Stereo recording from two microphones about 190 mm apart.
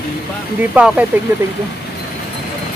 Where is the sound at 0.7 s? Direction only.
5° right (ahead or behind).